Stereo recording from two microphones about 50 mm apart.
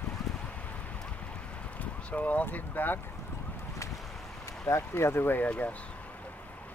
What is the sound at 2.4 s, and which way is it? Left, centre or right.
Speech, left.